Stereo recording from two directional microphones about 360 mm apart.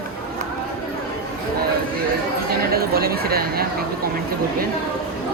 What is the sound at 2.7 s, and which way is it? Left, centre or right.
Speech, right.